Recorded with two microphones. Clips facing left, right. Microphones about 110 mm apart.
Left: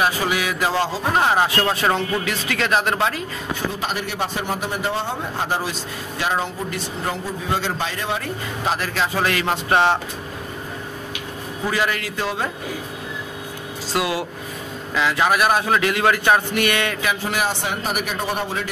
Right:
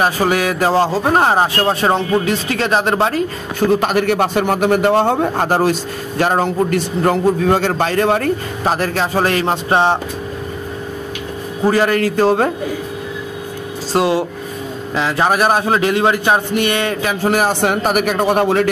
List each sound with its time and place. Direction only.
0.0 s speech: 45° right (ahead or behind)
3.7 s a man's voice: 60° right (ahead or behind); by 9.9 s 25° right (ahead or behind)
11.6 s a man's voice: 40° right (ahead or behind)
13.9 s speech: 30° right (ahead or behind); by 18.7 s 65° right (ahead or behind)